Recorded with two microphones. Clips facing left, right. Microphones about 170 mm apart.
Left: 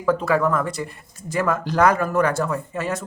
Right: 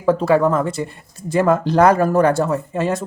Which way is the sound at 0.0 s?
30° right (ahead or behind).